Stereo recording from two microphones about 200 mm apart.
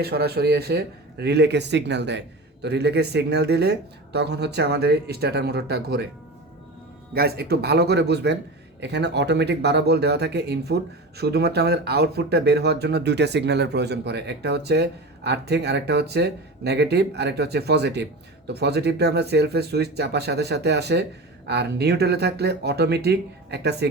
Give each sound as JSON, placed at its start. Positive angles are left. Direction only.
{"t": 0.0, "sound": "speech", "side_deg": -55}
{"t": 7.1, "sound": "speech", "side_deg": -50}